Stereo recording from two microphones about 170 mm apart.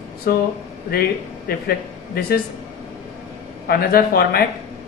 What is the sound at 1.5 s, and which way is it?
Speech, 60° left (ahead or behind).